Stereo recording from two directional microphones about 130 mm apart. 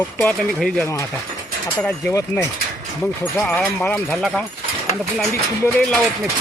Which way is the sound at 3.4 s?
10° left (ahead or behind).